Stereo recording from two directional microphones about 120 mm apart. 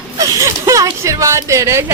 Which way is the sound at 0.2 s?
25° right (ahead or behind).